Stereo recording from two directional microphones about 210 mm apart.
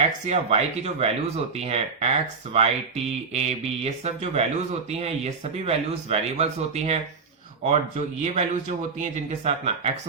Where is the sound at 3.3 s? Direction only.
30° right (ahead or behind).